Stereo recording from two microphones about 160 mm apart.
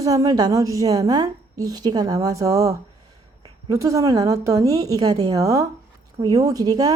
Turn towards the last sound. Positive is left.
turn(degrees=-25)  # may be behind; listen again after turning